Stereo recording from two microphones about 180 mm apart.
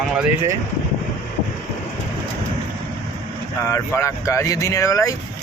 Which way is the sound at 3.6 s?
15° left (ahead or behind).